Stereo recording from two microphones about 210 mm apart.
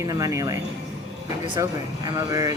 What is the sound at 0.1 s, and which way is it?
Speech, 15° right (ahead or behind).